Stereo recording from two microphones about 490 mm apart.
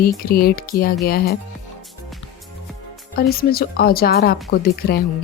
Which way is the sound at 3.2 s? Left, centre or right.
Centre.